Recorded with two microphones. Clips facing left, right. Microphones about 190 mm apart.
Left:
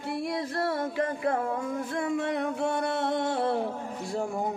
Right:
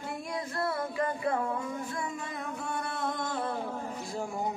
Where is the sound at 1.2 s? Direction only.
60° left (ahead or behind); by 3.5 s 75° left (ahead or behind).